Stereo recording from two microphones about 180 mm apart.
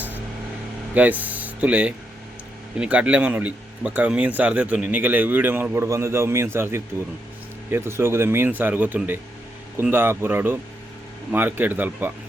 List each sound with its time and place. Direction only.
0.9 s speech: 10° right (ahead or behind)